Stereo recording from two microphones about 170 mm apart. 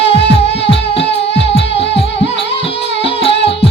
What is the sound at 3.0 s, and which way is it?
Music, 35° left (ahead or behind).